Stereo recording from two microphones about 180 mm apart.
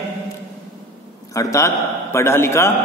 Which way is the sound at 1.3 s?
15° left (ahead or behind).